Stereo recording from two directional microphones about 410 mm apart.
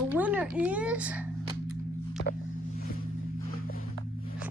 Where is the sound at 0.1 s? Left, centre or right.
Centre.